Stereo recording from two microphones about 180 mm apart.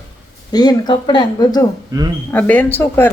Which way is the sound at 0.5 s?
20° left (ahead or behind).